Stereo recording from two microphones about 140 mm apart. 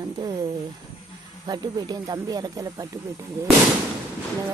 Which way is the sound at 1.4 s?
30° right (ahead or behind).